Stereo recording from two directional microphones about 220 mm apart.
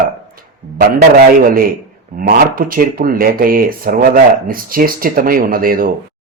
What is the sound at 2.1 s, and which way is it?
Speech, 40° right (ahead or behind).